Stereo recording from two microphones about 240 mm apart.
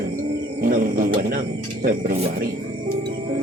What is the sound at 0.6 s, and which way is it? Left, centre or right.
Speech, right.